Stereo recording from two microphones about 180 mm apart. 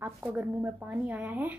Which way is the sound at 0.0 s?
10° right (ahead or behind).